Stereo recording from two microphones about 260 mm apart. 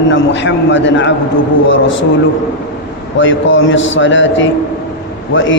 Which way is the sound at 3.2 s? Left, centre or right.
Left.